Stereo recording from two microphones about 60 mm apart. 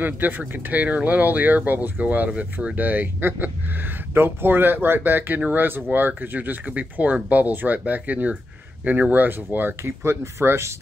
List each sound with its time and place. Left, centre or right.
0.0 s speech: right
9.8 s speech: right